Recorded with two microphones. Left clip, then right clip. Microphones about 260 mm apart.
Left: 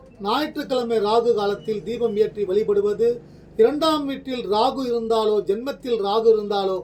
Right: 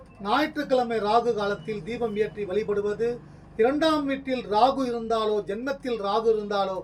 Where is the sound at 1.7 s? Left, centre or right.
Centre.